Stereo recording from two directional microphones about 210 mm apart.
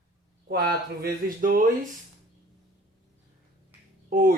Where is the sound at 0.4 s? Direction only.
45° right (ahead or behind).